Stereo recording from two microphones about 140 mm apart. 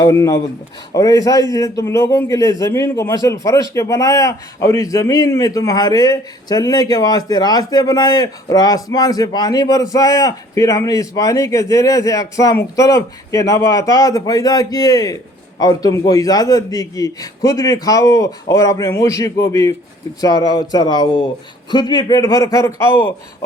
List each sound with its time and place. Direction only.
0.0 s a man's voice: 25° left (ahead or behind)